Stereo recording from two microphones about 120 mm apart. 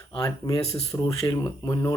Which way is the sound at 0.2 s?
30° left (ahead or behind).